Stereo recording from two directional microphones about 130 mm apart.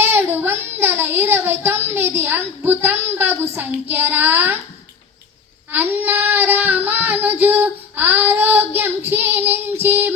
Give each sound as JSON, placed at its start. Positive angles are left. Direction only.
{"t": 0.0, "sound": "child singing", "side_deg": -15}
{"t": 5.7, "sound": "child singing", "side_deg": -15}